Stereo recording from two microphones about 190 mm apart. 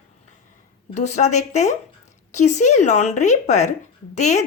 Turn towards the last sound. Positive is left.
turn(degrees=35)  # may be behind; listen again after turning